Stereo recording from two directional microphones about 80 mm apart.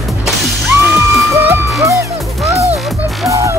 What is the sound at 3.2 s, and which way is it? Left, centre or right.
Music, right.